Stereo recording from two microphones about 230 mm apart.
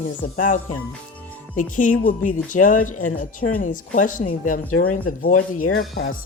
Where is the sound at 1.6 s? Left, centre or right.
Left.